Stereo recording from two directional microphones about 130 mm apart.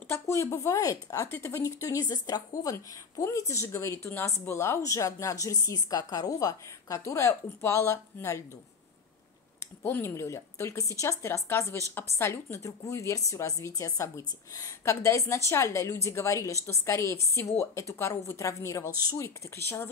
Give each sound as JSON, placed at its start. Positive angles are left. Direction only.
{"t": 0.3, "sound": "speech", "side_deg": 25}
{"t": 9.8, "sound": "speech", "side_deg": 20}